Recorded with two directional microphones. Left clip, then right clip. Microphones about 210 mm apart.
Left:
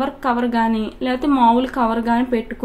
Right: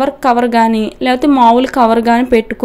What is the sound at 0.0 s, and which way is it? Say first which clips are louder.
Speech: right 9 dB; 35° right (ahead or behind).